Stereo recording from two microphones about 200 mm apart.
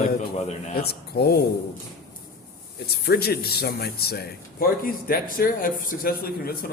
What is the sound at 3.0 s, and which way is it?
Speech, 50° left (ahead or behind).